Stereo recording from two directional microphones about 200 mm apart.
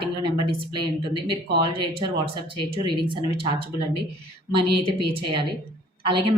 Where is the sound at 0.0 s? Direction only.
25° right (ahead or behind).